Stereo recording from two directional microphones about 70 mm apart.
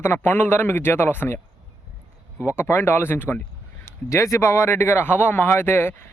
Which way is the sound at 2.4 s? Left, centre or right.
Left.